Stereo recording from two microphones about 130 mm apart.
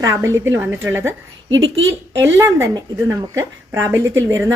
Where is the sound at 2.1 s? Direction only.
20° right (ahead or behind).